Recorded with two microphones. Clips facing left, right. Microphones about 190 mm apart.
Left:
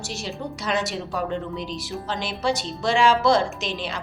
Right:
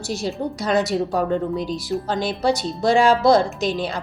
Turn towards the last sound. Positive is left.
turn(degrees=-40)  # may be behind; listen again after turning